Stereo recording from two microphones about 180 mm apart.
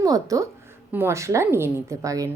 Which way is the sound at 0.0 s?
20° right (ahead or behind).